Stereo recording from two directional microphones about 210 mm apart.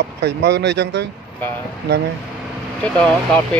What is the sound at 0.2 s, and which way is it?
Speech, 55° right (ahead or behind).